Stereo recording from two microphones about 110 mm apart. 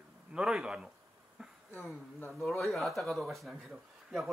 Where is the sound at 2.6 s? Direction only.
Centre (ahead or behind).